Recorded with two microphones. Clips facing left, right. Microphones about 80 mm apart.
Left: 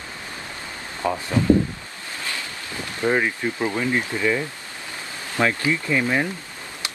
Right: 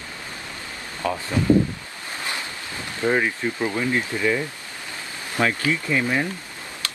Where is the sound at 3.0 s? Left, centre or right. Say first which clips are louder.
Even; left.